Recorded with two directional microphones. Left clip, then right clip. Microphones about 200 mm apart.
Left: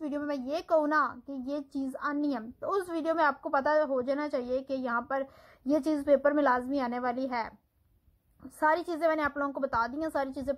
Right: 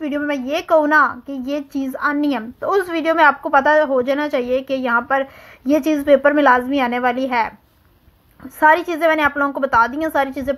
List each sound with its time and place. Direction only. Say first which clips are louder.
0.0 s a woman's voice: right 12 dB; 25° right (ahead or behind)
8.9 s a woman's voice: right 13 dB; 25° right (ahead or behind)